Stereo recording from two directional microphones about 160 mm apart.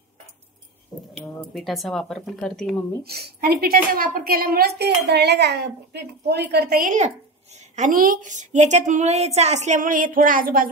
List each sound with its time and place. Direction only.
1.1 s speech: 5° left (ahead or behind)
3.0 s a woman's voice: 75° right (ahead or behind)